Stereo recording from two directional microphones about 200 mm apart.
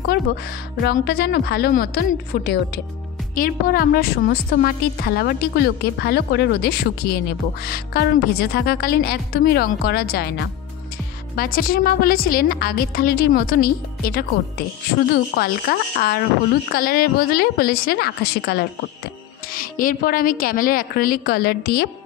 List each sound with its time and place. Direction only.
0.8 s a woman's voice: 50° left (ahead or behind)